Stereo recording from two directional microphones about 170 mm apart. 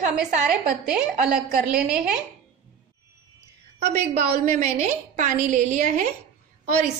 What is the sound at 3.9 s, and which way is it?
A woman's voice, 45° right (ahead or behind).